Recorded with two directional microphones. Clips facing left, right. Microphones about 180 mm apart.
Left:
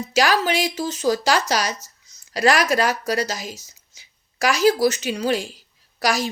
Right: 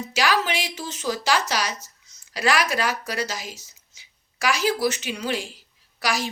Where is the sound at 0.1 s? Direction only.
40° left (ahead or behind).